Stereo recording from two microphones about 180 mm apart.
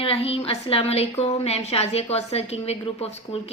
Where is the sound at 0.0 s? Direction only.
35° left (ahead or behind).